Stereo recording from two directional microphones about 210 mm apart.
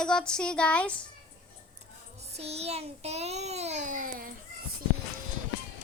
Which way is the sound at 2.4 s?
30° right (ahead or behind).